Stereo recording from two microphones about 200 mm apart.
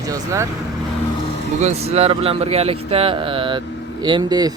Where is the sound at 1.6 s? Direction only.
35° right (ahead or behind).